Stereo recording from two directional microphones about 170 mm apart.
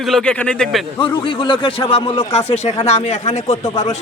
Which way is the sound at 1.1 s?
30° left (ahead or behind).